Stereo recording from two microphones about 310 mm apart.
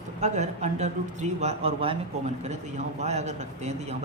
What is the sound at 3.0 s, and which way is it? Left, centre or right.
Speech, right.